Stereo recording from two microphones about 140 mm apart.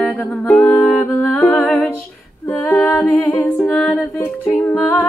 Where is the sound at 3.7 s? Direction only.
5° left (ahead or behind).